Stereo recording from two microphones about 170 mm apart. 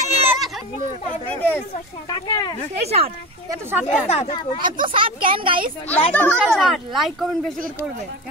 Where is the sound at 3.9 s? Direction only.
40° left (ahead or behind).